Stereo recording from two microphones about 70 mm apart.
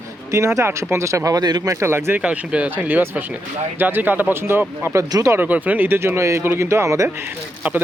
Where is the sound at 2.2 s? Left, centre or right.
Centre; by 5.0 s right.